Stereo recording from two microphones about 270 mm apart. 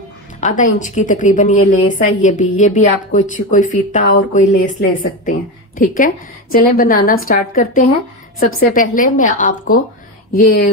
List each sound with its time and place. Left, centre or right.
0.4 s a woman's voice: left